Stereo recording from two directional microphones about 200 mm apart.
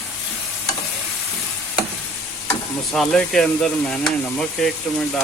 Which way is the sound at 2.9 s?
5° left (ahead or behind).